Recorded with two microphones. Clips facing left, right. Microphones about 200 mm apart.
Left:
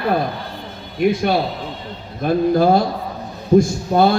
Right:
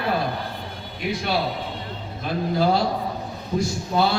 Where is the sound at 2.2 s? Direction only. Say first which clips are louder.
Left 8 dB; 50° left (ahead or behind).